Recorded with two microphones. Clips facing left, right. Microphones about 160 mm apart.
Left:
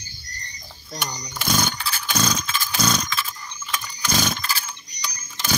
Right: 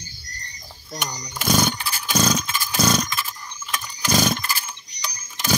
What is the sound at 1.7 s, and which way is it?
Motorcycle, 10° right (ahead or behind).